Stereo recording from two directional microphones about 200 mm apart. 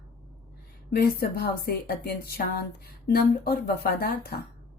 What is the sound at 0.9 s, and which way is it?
Speech, 50° left (ahead or behind).